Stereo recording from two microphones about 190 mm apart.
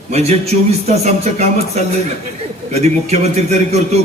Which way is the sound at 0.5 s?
40° right (ahead or behind).